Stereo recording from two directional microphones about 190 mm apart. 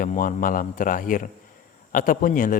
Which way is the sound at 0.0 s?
45° left (ahead or behind).